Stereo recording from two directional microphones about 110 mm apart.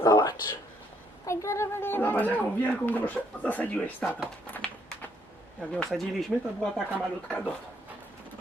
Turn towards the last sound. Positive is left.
turn(degrees=5)  # may be behind; listen again after turning